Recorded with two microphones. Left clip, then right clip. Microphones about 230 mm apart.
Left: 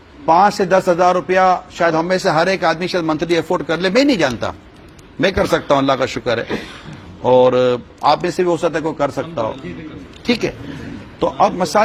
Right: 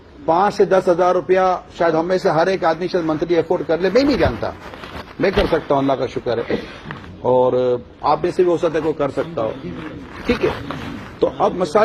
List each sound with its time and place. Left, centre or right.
0.3 s a man's voice: left
11.2 s a man's voice: left